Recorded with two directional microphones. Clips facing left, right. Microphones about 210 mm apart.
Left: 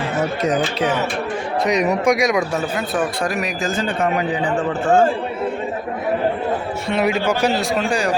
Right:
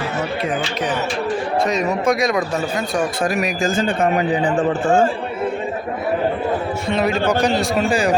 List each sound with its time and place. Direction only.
0.4 s speech: 45° left (ahead or behind)
1.6 s speech: 15° left (ahead or behind)
3.7 s a man's voice: 45° right (ahead or behind)
6.9 s a man's voice: 10° left (ahead or behind)